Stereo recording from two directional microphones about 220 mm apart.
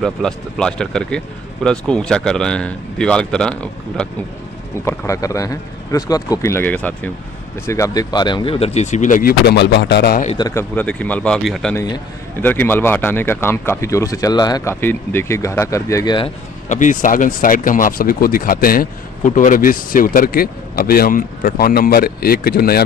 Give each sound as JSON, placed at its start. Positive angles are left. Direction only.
{"t": 0.0, "sound": "speech", "side_deg": 5}
{"t": 10.2, "sound": "speech", "side_deg": 20}
{"t": 10.7, "sound": "speech", "side_deg": 5}
{"t": 16.6, "sound": "speech", "side_deg": 35}